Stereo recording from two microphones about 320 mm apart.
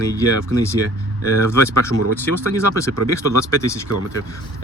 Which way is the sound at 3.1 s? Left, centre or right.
Centre.